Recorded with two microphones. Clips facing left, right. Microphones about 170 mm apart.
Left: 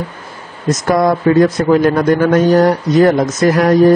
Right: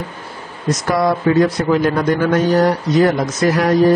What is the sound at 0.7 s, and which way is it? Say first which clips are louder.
Speech: left 4 dB; 45° left (ahead or behind).